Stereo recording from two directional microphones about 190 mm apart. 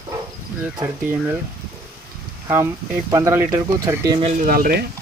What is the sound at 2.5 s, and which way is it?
Speech, 15° right (ahead or behind).